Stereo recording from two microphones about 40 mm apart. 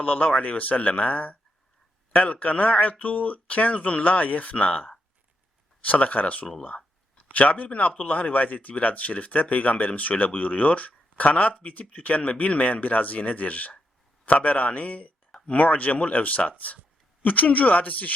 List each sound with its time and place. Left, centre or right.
0.0 s speech: left
5.8 s speech: left
15.3 s a sound: left
15.5 s speech: left